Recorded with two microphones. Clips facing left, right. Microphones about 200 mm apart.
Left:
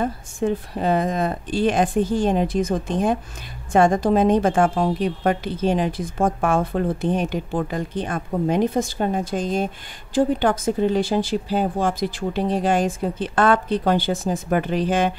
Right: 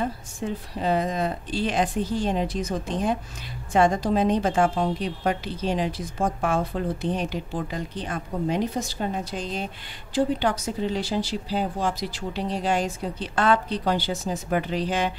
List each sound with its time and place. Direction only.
0.0 s a woman's voice: 50° left (ahead or behind)